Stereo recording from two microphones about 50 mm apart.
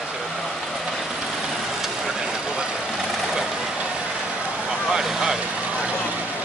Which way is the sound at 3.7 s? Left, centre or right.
Right.